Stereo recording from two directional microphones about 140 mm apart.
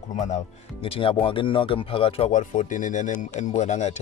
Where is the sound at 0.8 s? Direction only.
40° left (ahead or behind).